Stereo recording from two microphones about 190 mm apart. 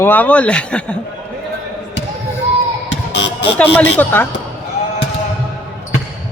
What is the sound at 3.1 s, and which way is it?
Vehicle, 65° left (ahead or behind).